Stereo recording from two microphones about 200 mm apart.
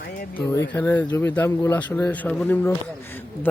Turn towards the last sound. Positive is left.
turn(degrees=10)  # may be behind; listen again after turning